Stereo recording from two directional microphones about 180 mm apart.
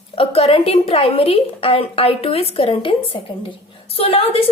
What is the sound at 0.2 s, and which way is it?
A woman's voice, 30° left (ahead or behind).